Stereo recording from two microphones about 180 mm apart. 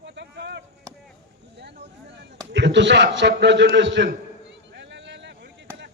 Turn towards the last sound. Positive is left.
turn(degrees=-75)  # may be behind; listen again after turning